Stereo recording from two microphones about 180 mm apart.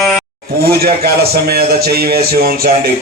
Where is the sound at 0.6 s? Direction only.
60° right (ahead or behind).